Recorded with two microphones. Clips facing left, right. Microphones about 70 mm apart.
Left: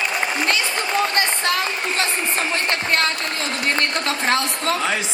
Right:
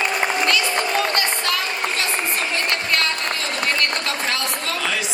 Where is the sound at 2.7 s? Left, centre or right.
Left.